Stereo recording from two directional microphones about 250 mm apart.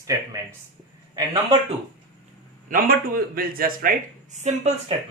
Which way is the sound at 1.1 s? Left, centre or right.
Centre.